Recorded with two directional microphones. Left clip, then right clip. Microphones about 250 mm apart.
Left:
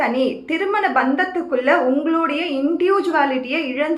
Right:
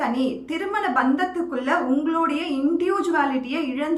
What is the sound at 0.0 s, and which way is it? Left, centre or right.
A woman's voice, centre.